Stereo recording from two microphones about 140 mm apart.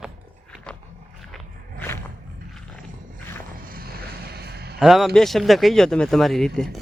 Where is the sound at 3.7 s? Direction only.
90° right.